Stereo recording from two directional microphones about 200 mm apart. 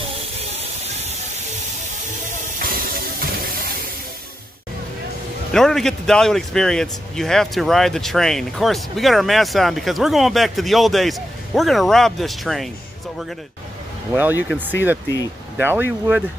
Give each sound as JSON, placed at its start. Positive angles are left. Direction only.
{"t": 3.2, "sound": "a sound", "side_deg": -45}
{"t": 5.5, "sound": "a man's voice", "side_deg": 5}
{"t": 14.1, "sound": "speech", "side_deg": -10}